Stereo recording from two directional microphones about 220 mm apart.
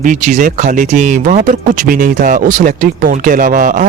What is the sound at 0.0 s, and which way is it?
Speech, 35° right (ahead or behind).